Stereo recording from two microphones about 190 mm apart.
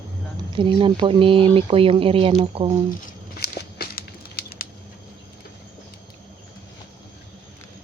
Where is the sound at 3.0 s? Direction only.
55° left (ahead or behind).